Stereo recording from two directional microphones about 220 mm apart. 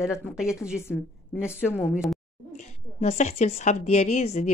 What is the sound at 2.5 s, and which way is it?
A woman's voice, 30° left (ahead or behind).